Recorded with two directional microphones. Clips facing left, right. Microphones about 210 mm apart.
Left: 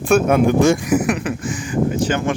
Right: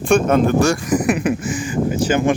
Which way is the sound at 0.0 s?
5° left (ahead or behind).